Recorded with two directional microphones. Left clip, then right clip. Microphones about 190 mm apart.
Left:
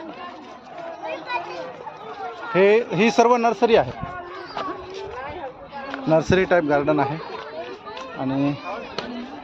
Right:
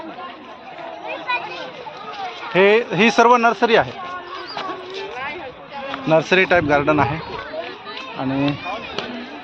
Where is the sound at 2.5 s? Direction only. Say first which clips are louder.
Right 2 dB; 5° right (ahead or behind).